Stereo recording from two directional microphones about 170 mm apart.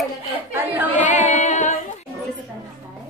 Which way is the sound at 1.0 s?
45° left (ahead or behind).